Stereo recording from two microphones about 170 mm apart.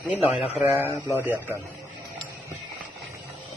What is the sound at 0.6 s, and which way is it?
Speech, 15° right (ahead or behind).